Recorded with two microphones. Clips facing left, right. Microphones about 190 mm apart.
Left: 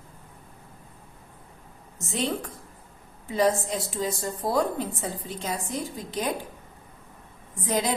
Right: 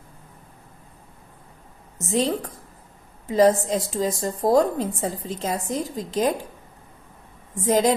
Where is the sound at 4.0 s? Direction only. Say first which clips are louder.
Right 4 dB; 40° right (ahead or behind).